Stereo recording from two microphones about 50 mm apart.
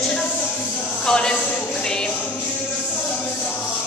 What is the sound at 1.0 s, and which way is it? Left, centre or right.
Speech, centre.